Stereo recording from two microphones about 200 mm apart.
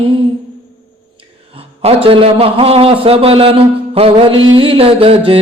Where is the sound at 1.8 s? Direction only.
25° right (ahead or behind).